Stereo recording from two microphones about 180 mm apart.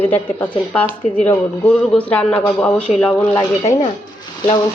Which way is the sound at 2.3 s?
10° left (ahead or behind).